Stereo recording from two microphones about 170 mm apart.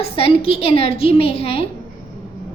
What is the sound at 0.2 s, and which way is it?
A woman's voice, 35° left (ahead or behind).